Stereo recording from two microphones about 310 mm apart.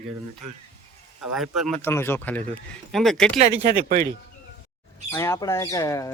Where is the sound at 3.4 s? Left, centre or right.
Right.